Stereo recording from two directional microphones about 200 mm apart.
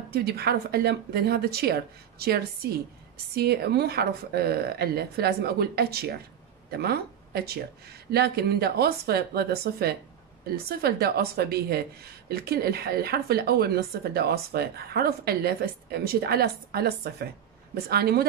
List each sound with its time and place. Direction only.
0.1 s a woman's voice: 50° right (ahead or behind)